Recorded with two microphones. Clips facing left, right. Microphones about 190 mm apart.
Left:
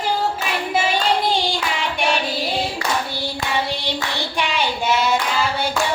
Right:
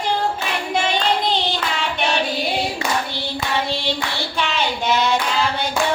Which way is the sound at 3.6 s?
15° left (ahead or behind).